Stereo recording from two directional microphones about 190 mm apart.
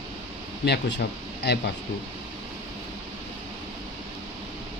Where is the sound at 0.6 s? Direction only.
60° left (ahead or behind).